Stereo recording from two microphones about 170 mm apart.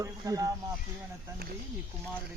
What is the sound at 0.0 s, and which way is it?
Speech, 20° right (ahead or behind).